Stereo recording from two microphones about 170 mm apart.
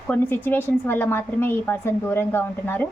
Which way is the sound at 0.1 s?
10° left (ahead or behind).